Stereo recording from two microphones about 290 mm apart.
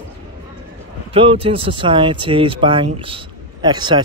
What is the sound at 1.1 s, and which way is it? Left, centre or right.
Speech, centre.